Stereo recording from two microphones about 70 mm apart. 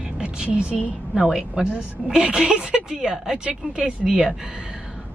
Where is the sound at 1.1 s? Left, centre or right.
Centre.